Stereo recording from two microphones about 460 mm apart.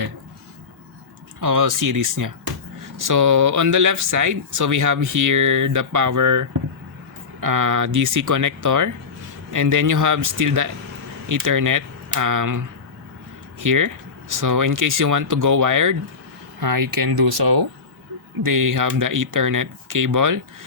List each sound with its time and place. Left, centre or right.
1.4 s speech: right